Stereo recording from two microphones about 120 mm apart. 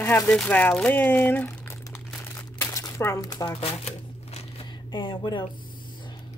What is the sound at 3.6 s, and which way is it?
Crumpling, 60° left (ahead or behind).